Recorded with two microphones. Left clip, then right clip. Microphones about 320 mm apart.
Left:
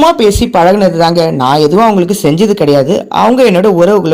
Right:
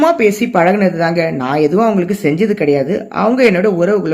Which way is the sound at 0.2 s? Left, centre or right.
Centre.